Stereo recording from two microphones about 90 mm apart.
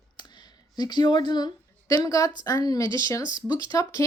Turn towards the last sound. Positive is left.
turn(degrees=40)  # may be behind; listen again after turning